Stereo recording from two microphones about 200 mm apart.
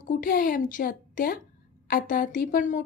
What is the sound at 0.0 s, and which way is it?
A woman's voice, 45° left (ahead or behind).